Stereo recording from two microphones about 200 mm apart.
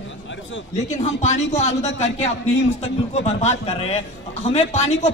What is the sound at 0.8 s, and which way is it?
A man's voice, 35° left (ahead or behind).